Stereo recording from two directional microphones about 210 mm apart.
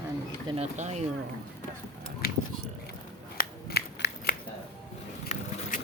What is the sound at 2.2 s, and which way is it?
Biting, 45° left (ahead or behind).